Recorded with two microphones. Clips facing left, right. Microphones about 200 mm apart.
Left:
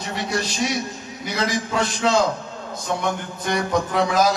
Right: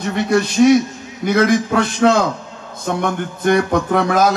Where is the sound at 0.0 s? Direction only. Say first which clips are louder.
Right 9 dB; 55° right (ahead or behind).